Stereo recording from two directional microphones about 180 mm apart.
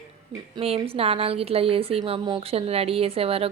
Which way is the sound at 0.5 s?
30° right (ahead or behind).